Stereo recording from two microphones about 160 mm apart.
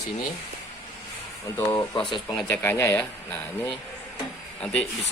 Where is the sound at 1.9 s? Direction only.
30° left (ahead or behind).